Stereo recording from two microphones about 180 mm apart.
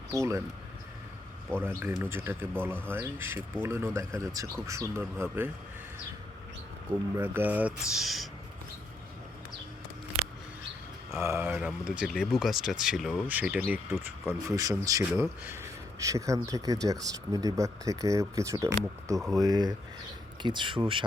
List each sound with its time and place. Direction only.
0.1 s speech: 15° right (ahead or behind)
1.6 s speech: 10° right (ahead or behind)
7.2 s speech: 10° right (ahead or behind)
11.1 s speech: 15° right (ahead or behind)